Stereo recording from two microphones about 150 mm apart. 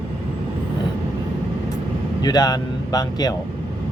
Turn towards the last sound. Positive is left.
turn(degrees=25)  # may be behind; listen again after turning